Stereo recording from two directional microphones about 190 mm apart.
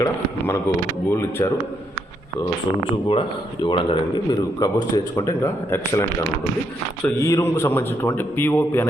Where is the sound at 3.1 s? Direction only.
25° left (ahead or behind).